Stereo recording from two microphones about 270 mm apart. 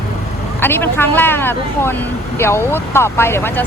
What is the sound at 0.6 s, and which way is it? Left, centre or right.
Speech, centre.